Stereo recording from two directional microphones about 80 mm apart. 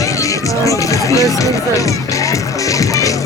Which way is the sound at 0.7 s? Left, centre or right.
Left.